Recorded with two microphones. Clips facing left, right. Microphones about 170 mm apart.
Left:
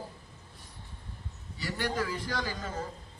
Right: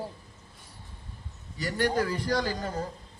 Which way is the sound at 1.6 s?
45° right (ahead or behind).